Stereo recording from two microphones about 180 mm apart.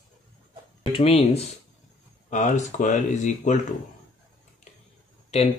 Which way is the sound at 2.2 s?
45° left (ahead or behind).